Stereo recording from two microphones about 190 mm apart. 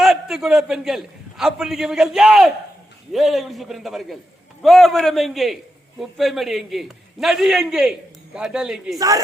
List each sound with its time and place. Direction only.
0.0 s a man's voice: centre (ahead or behind)
9.0 s speech: 20° right (ahead or behind)